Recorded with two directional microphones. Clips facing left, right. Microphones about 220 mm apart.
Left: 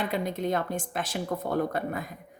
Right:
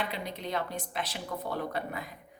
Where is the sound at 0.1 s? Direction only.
45° left (ahead or behind).